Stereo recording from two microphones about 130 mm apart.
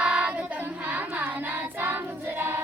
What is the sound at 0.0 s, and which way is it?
Choir, 5° right (ahead or behind).